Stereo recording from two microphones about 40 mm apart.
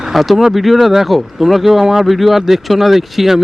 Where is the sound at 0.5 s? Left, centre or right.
Centre.